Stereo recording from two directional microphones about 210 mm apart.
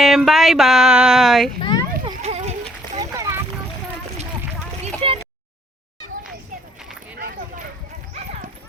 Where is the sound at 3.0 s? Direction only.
15° right (ahead or behind).